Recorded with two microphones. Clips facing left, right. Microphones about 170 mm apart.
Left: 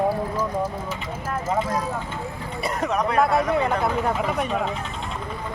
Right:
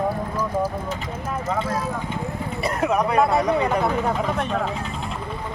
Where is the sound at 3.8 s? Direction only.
5° left (ahead or behind).